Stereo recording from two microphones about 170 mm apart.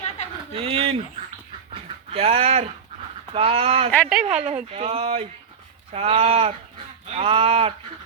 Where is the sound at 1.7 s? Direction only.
35° right (ahead or behind).